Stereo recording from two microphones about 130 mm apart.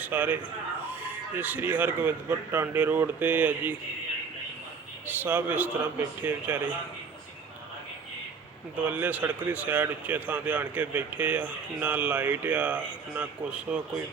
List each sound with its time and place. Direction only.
0.0 s a man's voice: 15° right (ahead or behind)
1.4 s a man's voice: 15° right (ahead or behind)
5.0 s a man's voice: 15° right (ahead or behind)
8.8 s a man's voice: 15° right (ahead or behind)